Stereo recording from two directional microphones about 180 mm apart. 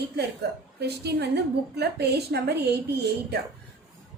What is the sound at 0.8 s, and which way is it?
A woman's voice, 65° right (ahead or behind).